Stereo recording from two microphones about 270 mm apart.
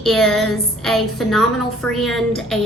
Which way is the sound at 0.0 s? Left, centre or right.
Centre.